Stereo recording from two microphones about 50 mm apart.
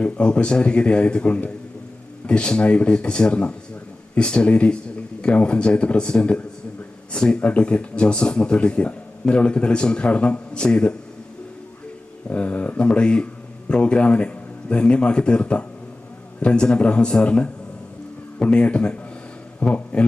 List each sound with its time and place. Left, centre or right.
0.0 s speech: left
12.3 s a man's voice: left